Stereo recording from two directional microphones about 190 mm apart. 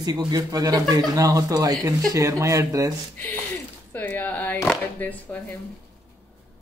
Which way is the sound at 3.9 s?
10° left (ahead or behind).